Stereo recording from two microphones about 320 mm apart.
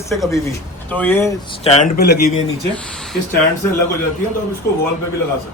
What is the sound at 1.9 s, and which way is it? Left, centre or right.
Speech, left.